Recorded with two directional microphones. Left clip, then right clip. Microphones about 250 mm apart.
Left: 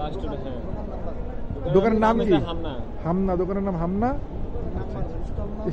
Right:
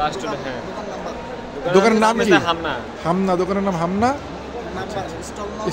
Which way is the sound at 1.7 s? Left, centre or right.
Centre.